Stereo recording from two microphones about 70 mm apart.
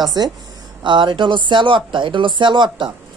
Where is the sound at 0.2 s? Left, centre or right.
Right.